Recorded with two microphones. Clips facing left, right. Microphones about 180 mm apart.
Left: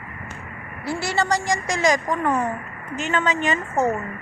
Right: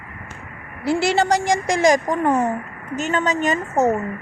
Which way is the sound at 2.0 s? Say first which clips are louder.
Right 3 dB; 20° right (ahead or behind).